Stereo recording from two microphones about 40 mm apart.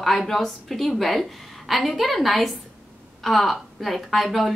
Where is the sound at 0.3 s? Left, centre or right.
Centre.